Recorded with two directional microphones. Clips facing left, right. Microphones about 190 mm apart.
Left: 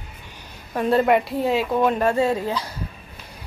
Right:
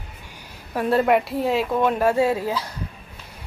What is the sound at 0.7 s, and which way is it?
Speech, 5° right (ahead or behind).